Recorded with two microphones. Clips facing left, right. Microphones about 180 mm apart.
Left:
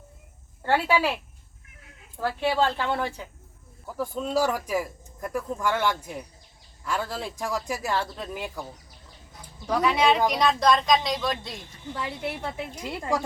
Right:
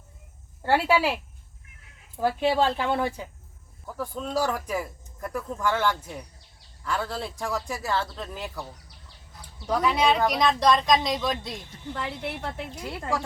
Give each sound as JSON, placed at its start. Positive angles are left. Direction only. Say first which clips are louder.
{"t": 0.6, "sound": "speech", "louder": "right 1 dB", "side_deg": -10}
{"t": 3.8, "sound": "a man's voice", "louder": "left 3 dB", "side_deg": 10}
{"t": 9.6, "sound": "speech", "louder": "left 1 dB", "side_deg": 0}
{"t": 12.7, "sound": "speech", "louder": "left 3 dB", "side_deg": 20}